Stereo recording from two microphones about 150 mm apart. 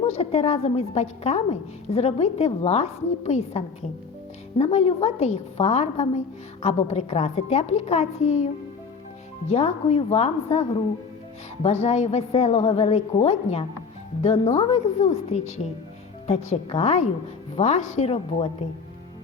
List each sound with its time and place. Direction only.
0.0 s a woman's voice: 45° left (ahead or behind)
9.5 s a woman's voice: 45° left (ahead or behind)